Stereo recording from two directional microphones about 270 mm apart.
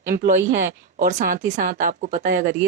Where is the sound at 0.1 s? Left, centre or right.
Right.